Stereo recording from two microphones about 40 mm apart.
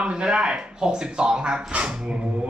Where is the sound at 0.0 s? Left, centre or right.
Right.